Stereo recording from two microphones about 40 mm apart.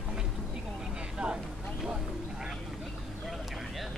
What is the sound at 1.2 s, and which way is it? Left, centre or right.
Vehicle, right.